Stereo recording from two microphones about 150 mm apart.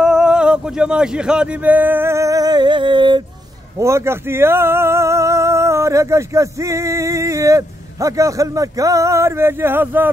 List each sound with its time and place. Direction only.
0.0 s speech: 5° right (ahead or behind); by 3.3 s 30° right (ahead or behind)
3.7 s speech: 20° right (ahead or behind)